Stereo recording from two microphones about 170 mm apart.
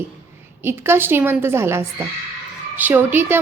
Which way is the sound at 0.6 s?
15° right (ahead or behind).